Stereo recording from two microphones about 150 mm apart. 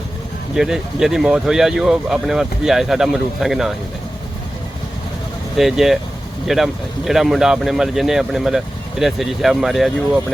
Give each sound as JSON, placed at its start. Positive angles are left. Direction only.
{"t": 0.5, "sound": "speech", "side_deg": -5}
{"t": 5.5, "sound": "speech", "side_deg": 0}